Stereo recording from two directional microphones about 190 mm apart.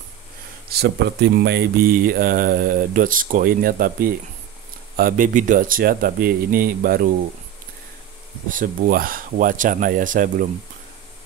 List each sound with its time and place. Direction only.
0.7 s speech: 60° right (ahead or behind)
8.5 s speech: 45° right (ahead or behind)